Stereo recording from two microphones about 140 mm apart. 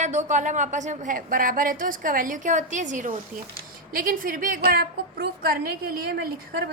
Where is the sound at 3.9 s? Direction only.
90° right.